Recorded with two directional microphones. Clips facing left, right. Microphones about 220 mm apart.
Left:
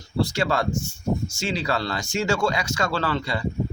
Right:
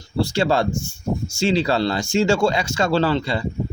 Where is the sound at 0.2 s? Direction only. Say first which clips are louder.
Right 4 dB; 30° right (ahead or behind).